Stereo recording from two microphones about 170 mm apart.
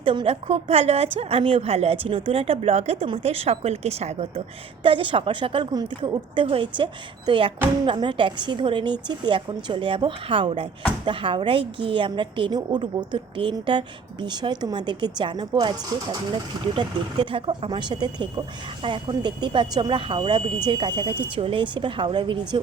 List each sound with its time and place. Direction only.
0.0 s a woman's voice: 30° right (ahead or behind)